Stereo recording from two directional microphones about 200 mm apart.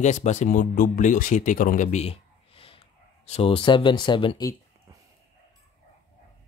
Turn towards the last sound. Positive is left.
turn(degrees=20)  # may be behind; listen again after turning